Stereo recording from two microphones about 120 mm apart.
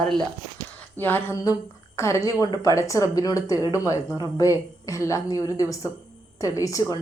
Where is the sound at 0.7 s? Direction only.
15° left (ahead or behind).